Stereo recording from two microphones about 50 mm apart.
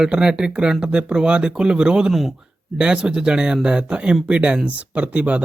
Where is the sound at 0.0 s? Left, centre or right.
Centre.